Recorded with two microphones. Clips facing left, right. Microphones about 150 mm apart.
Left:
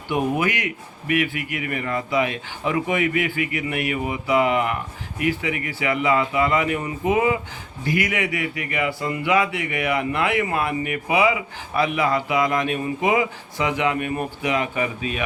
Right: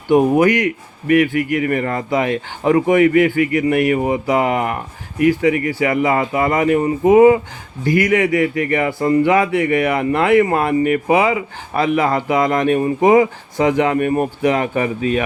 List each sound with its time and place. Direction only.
0.1 s speech: 45° right (ahead or behind)